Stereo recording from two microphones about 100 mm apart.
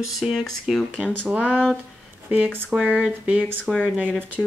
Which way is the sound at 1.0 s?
15° right (ahead or behind).